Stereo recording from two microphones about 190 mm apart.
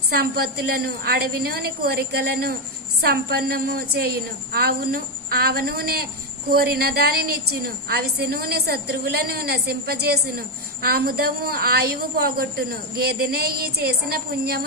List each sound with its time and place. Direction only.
0.1 s a woman's voice: 55° right (ahead or behind)